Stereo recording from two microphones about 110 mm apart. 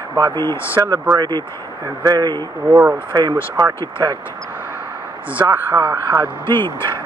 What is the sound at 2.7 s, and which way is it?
Speech, 20° right (ahead or behind).